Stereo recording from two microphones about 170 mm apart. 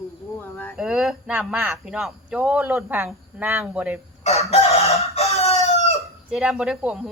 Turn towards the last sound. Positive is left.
turn(degrees=-5)  # may be behind; listen again after turning